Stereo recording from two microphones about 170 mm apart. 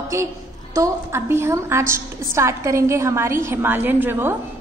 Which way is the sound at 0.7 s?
15° right (ahead or behind).